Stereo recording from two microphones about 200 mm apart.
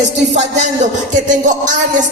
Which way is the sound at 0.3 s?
35° right (ahead or behind).